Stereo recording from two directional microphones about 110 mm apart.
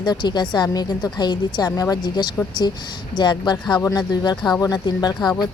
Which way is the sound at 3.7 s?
30° left (ahead or behind).